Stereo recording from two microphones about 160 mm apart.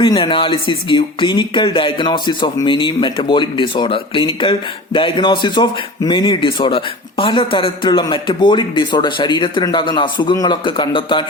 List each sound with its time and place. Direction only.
0.0 s speech: 30° left (ahead or behind)